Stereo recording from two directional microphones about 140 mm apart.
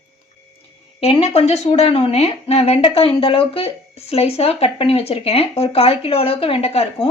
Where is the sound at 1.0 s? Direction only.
45° left (ahead or behind).